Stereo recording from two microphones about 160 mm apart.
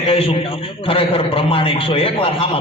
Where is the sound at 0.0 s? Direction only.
35° left (ahead or behind).